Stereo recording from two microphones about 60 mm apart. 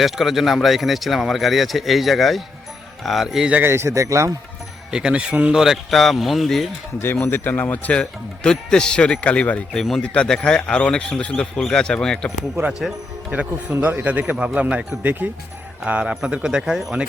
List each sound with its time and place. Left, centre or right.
0.0 s speech: centre
3.6 s a man's voice: right
4.9 s speech: centre
5.5 s speech: centre
7.0 s speech: left
8.4 s speech: centre
9.7 s speech: centre
12.6 s speech: right
13.3 s speech: right
16.2 s speech: centre